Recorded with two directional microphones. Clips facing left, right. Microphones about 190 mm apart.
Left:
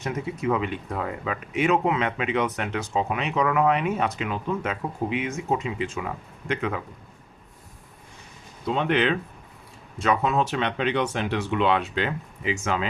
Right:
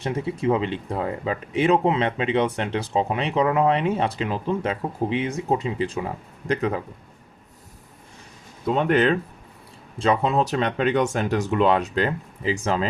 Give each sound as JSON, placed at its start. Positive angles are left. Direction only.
{"t": 0.0, "sound": "speech", "side_deg": -30}
{"t": 8.6, "sound": "speech", "side_deg": -45}
{"t": 10.0, "sound": "speech", "side_deg": -30}